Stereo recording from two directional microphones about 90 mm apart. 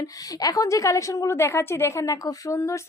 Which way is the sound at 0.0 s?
40° left (ahead or behind).